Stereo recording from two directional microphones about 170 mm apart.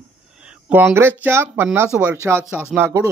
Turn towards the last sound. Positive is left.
turn(degrees=-15)  # may be behind; listen again after turning